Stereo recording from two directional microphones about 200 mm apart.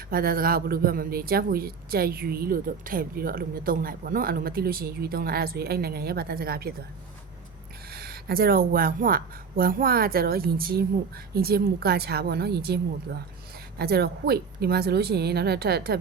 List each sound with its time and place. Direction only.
0.1 s a man's voice: 45° right (ahead or behind)
7.9 s a man's voice: 50° right (ahead or behind)